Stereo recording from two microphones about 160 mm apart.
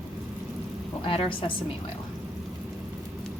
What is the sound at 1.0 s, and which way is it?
Speech, 35° left (ahead or behind).